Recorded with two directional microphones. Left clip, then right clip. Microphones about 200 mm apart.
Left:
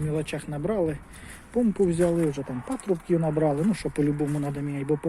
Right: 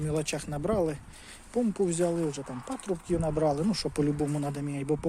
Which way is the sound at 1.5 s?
Centre (ahead or behind).